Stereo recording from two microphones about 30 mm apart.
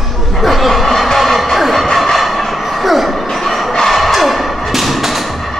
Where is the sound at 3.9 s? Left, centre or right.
Centre.